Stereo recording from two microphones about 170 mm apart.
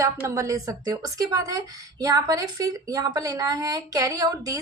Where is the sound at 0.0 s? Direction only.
15° right (ahead or behind).